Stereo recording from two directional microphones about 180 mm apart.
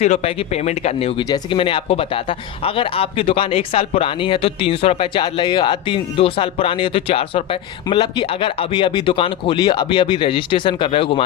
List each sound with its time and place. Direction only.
0.0 s speech: 35° left (ahead or behind)